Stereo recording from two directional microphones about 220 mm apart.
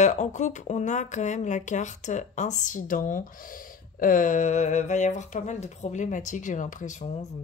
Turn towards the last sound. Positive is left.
turn(degrees=30)  # may be behind; listen again after turning